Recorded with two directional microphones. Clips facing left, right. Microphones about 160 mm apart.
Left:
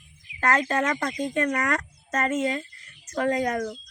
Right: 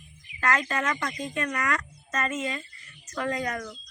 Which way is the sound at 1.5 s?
45° left (ahead or behind).